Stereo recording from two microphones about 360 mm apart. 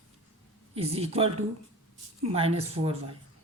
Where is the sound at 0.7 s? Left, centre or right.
Centre.